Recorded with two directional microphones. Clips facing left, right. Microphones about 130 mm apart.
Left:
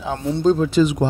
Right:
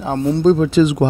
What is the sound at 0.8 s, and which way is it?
Speech, 90° right.